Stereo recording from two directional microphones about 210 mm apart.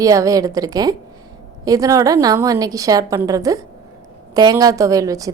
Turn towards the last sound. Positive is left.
turn(degrees=-15)  # may be behind; listen again after turning